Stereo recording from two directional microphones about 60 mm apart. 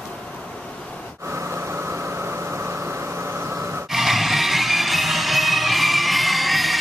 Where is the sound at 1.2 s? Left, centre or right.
Right.